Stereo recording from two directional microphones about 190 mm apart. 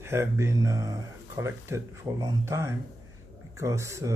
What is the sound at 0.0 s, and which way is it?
Speech, 15° right (ahead or behind).